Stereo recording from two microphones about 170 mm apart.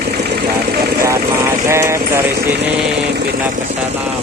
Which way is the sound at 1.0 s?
15° right (ahead or behind).